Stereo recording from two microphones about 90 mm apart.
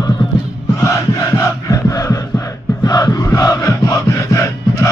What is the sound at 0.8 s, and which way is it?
Crowd, 35° left (ahead or behind).